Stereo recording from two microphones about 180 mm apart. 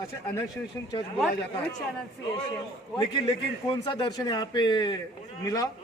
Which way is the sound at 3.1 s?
25° left (ahead or behind).